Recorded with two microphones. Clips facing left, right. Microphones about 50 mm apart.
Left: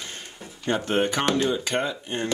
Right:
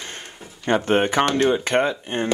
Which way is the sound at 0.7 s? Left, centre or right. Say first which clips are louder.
Right 5 dB; right.